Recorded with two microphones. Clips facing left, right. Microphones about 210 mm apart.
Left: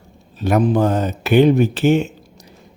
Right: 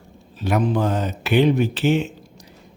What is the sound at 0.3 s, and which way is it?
Speech, 45° left (ahead or behind).